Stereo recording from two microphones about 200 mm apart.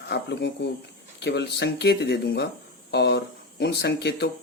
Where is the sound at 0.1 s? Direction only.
55° left (ahead or behind).